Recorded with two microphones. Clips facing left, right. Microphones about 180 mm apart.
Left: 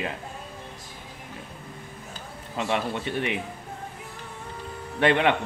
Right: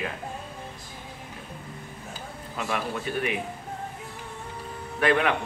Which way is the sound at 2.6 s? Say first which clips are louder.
Left 3 dB; 25° left (ahead or behind).